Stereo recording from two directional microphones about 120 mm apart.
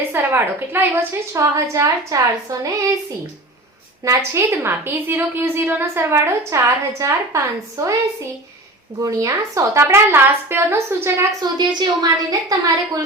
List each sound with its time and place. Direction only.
0.1 s a woman's voice: 20° right (ahead or behind)
4.0 s a woman's voice: 25° right (ahead or behind)
9.0 s a woman's voice: 25° right (ahead or behind)
11.3 s a woman's voice: 35° right (ahead or behind)